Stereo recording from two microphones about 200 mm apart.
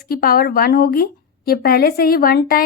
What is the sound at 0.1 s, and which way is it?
A woman's voice, 50° left (ahead or behind).